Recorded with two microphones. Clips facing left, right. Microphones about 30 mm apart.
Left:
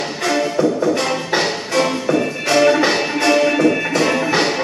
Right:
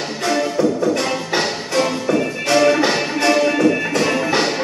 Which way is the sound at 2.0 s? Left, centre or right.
Centre.